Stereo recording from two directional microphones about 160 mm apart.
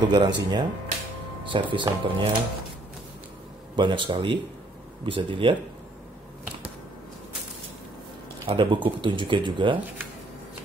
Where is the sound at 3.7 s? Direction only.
30° right (ahead or behind).